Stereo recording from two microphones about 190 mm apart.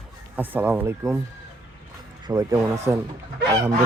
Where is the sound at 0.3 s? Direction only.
10° right (ahead or behind).